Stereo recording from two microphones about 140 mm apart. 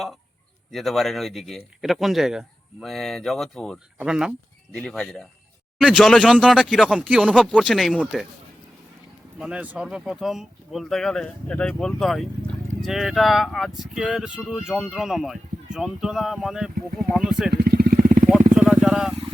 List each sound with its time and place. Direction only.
0.7 s speech: centre (ahead or behind)
4.7 s speech: 5° left (ahead or behind)
9.4 s speech: 10° right (ahead or behind)
17.6 s vehicle: 90° right
18.5 s vehicle: 5° right (ahead or behind)